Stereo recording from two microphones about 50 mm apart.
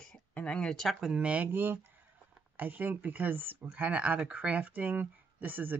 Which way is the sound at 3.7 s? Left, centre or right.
Right.